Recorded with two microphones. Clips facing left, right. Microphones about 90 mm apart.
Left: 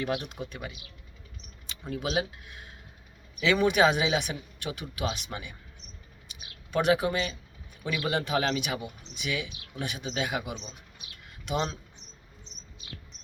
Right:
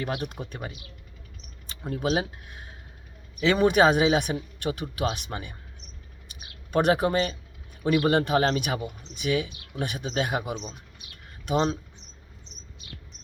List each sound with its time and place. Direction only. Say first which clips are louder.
0.0 s speech: even; 45° right (ahead or behind)
6.2 s a sound: right 2 dB; 45° right (ahead or behind)
7.9 s speech: right 7 dB; 45° right (ahead or behind)
11.4 s speech: right 6 dB; 40° right (ahead or behind)